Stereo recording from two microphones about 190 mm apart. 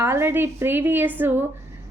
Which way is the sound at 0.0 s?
15° right (ahead or behind).